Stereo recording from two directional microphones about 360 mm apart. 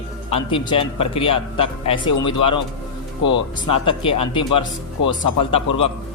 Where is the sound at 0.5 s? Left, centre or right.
Centre.